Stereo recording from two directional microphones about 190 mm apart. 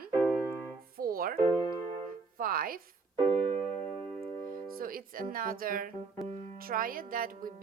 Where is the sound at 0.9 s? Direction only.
50° right (ahead or behind).